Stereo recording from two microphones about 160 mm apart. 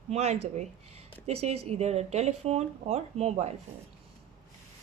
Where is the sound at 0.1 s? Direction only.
40° right (ahead or behind).